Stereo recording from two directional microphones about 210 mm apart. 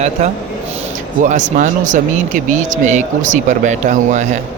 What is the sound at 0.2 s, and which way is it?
Speech, 35° right (ahead or behind).